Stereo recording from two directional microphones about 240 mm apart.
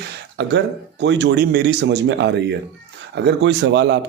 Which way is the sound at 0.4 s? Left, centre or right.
Right.